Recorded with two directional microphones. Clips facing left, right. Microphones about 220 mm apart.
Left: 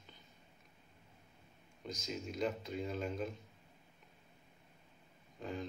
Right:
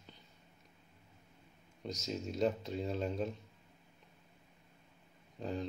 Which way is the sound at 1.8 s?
40° right (ahead or behind).